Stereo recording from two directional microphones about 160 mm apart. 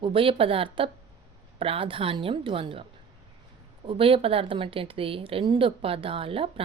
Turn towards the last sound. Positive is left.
turn(degrees=-35)  # may be behind; listen again after turning